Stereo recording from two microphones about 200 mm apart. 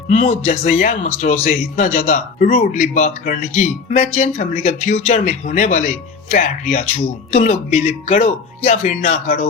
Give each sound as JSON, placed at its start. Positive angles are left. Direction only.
{"t": 0.1, "sound": "speech", "side_deg": 35}